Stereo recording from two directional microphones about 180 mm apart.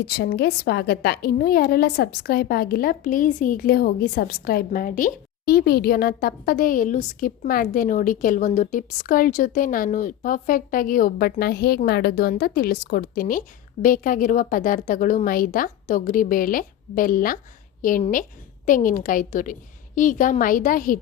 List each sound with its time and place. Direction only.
0.1 s a woman's voice: 65° left (ahead or behind)